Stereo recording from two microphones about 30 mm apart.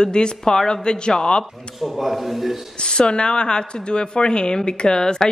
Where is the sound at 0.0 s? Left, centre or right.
Left.